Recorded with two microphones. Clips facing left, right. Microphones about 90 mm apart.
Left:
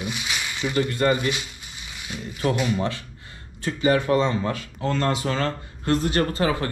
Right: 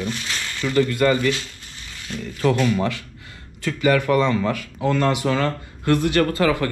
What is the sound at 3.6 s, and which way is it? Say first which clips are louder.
Speech: right 2 dB; 75° right (ahead or behind).